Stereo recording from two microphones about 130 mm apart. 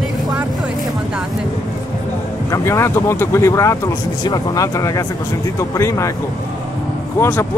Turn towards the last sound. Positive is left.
turn(degrees=20)  # may be behind; listen again after turning